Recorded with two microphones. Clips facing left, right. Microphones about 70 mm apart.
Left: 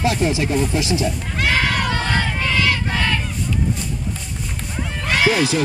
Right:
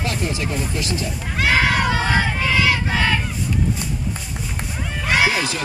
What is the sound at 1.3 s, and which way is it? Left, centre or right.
Crowd, centre.